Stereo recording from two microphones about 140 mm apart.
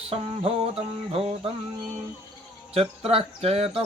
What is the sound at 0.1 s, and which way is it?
Music, 40° right (ahead or behind).